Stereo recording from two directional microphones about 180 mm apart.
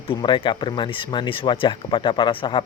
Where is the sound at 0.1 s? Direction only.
25° left (ahead or behind).